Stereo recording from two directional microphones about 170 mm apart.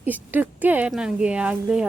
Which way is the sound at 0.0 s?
10° right (ahead or behind).